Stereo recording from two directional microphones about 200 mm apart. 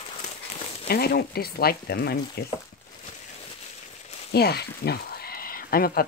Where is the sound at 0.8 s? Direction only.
50° left (ahead or behind).